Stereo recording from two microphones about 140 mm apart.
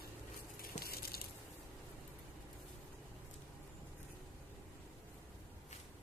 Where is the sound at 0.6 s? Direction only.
90° left.